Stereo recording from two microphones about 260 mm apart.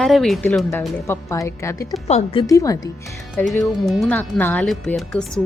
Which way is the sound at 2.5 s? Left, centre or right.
Centre.